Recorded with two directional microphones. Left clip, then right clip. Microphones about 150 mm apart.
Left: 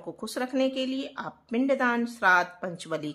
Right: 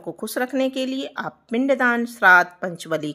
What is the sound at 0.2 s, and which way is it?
A woman's voice, 35° right (ahead or behind).